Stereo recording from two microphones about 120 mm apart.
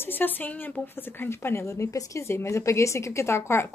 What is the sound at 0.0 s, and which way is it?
A woman's voice, 15° left (ahead or behind).